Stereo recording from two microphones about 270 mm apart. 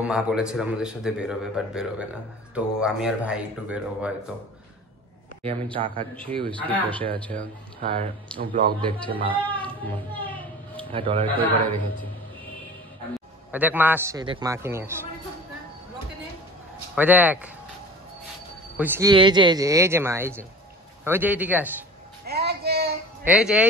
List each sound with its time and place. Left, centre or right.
0.0 s a man's voice: centre
5.4 s speech: right
7.8 s speech: right
8.4 s a man's voice: right
8.8 s speech: centre
10.8 s a man's voice: centre
11.3 s a man's voice: centre
13.5 s speech: centre
16.9 s a man's voice: centre
18.8 s speech: centre
22.2 s a sound: right
23.2 s a man's voice: centre